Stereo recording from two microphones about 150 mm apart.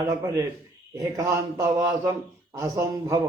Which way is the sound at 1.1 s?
25° right (ahead or behind).